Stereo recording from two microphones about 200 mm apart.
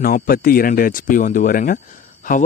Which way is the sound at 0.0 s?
45° left (ahead or behind).